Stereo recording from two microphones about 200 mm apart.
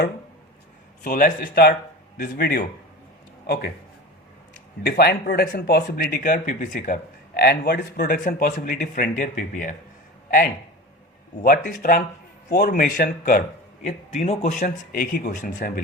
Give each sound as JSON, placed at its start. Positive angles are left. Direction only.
{"t": 1.0, "sound": "a man's voice", "side_deg": 45}
{"t": 4.9, "sound": "speech", "side_deg": 50}
{"t": 11.4, "sound": "speech", "side_deg": 45}
{"t": 13.8, "sound": "speech", "side_deg": 35}